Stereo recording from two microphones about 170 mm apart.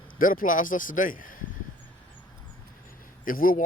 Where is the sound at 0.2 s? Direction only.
50° left (ahead or behind).